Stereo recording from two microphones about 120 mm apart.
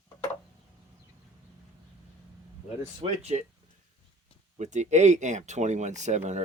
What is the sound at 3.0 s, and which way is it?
Speech, 60° right (ahead or behind).